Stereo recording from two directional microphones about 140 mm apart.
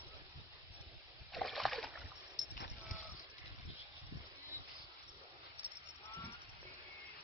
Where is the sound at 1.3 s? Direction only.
Centre (ahead or behind).